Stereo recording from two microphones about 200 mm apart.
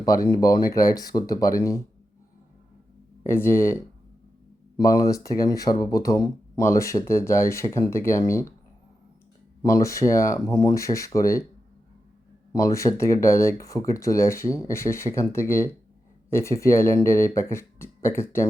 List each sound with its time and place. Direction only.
0.0 s speech: 20° left (ahead or behind)
3.2 s speech: 10° left (ahead or behind)
4.8 s speech: 20° left (ahead or behind)
9.6 s speech: 15° left (ahead or behind)
12.5 s speech: 15° left (ahead or behind)